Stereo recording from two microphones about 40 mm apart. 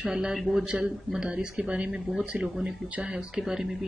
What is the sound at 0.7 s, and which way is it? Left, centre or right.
Speech, right.